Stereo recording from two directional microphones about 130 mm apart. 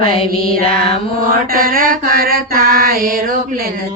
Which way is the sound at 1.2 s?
90° right.